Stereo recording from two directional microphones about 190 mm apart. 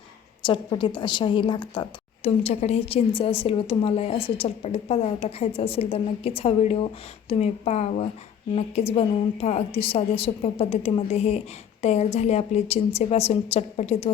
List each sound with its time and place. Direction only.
0.4 s a woman's voice: 25° left (ahead or behind)